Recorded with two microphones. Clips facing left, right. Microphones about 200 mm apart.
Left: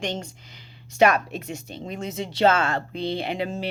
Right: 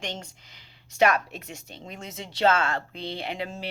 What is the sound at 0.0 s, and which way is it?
A woman's voice, 60° left (ahead or behind).